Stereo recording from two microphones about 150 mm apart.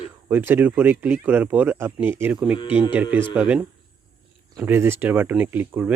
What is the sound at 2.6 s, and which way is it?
Speech, 35° left (ahead or behind).